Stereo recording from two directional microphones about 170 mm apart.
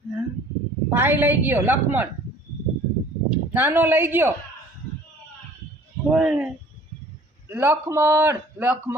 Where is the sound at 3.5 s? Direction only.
10° right (ahead or behind).